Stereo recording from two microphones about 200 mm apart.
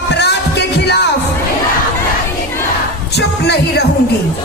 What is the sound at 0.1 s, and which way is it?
Music, 55° left (ahead or behind).